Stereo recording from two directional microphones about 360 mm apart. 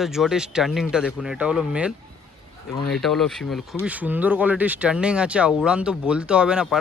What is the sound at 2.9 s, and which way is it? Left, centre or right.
Speech, centre.